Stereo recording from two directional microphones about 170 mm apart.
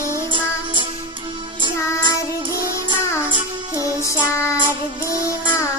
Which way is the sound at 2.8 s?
25° right (ahead or behind).